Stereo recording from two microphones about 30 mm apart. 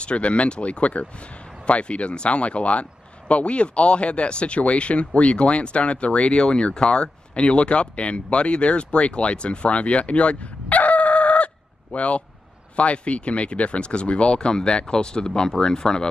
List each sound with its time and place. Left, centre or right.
0.0 s speech: left
6.3 s speech: left